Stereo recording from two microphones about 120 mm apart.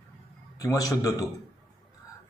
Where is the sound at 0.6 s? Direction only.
30° left (ahead or behind).